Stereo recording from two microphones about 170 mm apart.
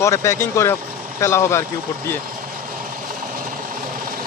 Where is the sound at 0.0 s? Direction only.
15° left (ahead or behind).